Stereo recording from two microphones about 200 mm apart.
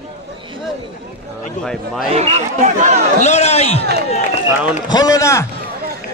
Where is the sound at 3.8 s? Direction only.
55° right (ahead or behind).